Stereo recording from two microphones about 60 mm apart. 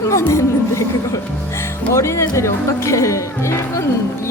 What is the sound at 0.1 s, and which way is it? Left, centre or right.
Speech, left.